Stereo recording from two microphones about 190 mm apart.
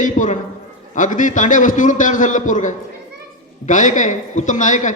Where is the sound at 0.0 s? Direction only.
40° left (ahead or behind).